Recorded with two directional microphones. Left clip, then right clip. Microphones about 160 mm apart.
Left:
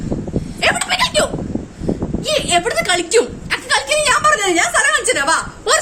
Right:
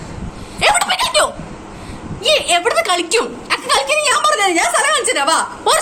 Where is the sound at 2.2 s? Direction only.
25° left (ahead or behind).